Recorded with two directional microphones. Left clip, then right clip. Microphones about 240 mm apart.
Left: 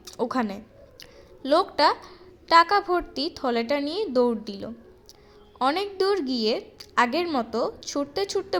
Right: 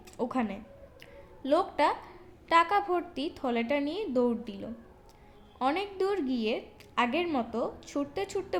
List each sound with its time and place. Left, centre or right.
0.2 s a woman's voice: centre